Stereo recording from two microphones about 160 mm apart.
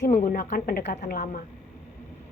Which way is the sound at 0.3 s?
65° left (ahead or behind).